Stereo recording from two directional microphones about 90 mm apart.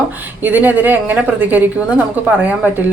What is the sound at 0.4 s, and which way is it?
Speech, 15° right (ahead or behind).